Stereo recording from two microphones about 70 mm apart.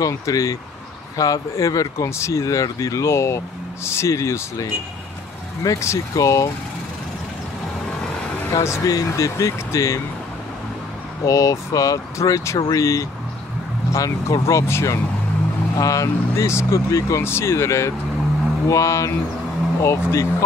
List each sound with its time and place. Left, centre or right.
0.0 s speech: left
8.6 s speech: left
11.2 s speech: left
17.2 s speech: left